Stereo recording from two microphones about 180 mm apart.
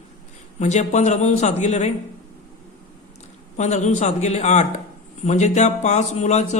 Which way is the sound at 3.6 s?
40° left (ahead or behind).